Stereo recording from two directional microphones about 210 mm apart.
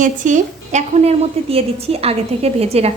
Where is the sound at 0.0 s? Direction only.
35° right (ahead or behind).